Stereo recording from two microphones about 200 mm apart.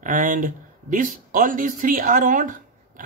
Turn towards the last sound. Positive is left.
turn(degrees=-40)  # may be behind; listen again after turning